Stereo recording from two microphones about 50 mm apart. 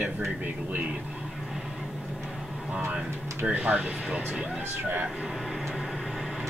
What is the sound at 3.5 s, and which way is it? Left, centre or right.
Speech, right.